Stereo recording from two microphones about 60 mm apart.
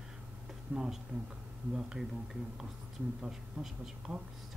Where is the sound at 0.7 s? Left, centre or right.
Right.